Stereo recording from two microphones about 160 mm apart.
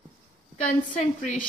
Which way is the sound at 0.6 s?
55° left (ahead or behind).